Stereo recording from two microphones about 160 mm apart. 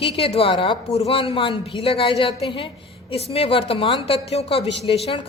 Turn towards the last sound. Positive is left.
turn(degrees=35)  # may be behind; listen again after turning